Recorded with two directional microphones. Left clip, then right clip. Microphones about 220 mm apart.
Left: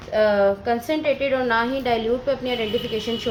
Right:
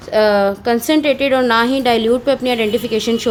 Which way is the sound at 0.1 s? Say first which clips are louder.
Right 5 dB; 55° right (ahead or behind).